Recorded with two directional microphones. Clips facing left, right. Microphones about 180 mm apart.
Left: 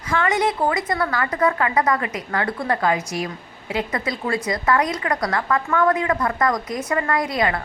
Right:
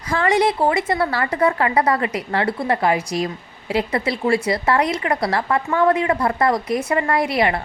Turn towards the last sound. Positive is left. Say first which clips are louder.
# right 3 dB
turn(degrees=-25)  # may be behind; listen again after turning